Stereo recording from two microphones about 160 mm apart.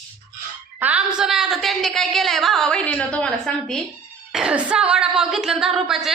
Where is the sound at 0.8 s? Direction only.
10° right (ahead or behind).